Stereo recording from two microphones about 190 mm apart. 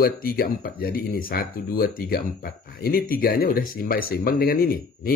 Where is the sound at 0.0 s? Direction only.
50° left (ahead or behind).